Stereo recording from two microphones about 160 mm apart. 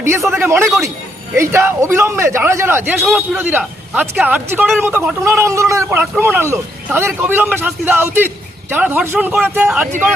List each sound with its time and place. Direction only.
0.3 s speech: 15° right (ahead or behind)